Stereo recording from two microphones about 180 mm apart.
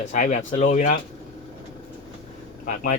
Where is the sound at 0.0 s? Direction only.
45° left (ahead or behind).